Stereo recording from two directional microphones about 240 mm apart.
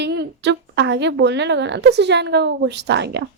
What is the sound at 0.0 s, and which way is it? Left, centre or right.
A woman's voice, right.